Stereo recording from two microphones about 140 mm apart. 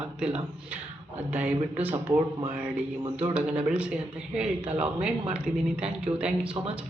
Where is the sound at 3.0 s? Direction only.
35° right (ahead or behind).